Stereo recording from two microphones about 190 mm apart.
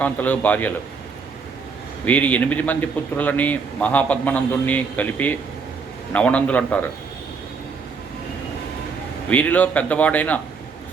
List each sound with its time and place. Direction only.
0.0 s speech: 10° left (ahead or behind)
2.0 s speech: 10° left (ahead or behind)
9.3 s speech: 10° left (ahead or behind)